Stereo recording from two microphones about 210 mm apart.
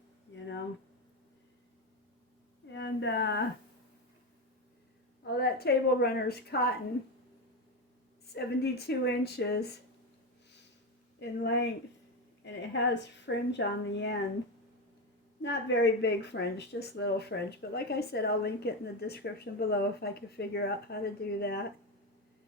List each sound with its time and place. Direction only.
2.7 s a sound: 55° left (ahead or behind)
5.2 s speech: 50° left (ahead or behind)
8.3 s speech: 50° left (ahead or behind)
11.2 s a woman's voice: 55° left (ahead or behind)
12.9 s a woman's voice: 55° left (ahead or behind)
15.4 s speech: 55° left (ahead or behind)